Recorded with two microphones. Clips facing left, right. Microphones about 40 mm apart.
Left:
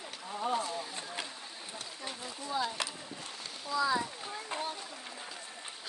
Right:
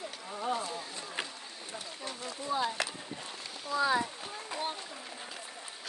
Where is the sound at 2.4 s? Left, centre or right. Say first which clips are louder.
Right 2 dB; centre.